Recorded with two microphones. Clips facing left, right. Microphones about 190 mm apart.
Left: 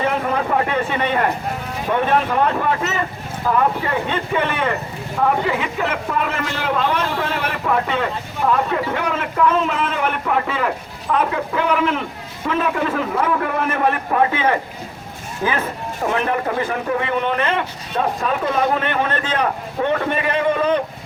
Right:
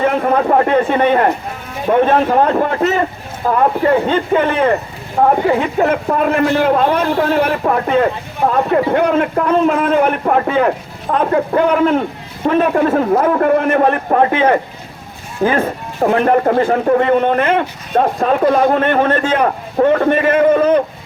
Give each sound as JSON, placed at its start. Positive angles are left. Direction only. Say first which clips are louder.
{"t": 0.0, "sound": "speech", "louder": "right 6 dB", "side_deg": -50}